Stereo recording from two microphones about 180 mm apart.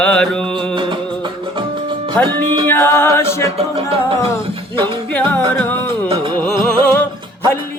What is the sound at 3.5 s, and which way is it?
Music, 30° right (ahead or behind).